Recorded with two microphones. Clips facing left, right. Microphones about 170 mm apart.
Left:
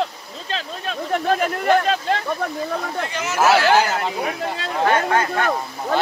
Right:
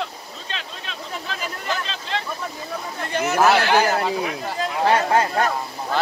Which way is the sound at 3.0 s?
55° right (ahead or behind).